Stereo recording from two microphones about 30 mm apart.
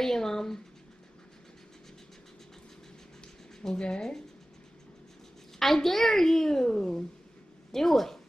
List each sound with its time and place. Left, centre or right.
0.0 s a sound: centre
3.7 s speech: left
5.6 s a woman's voice: centre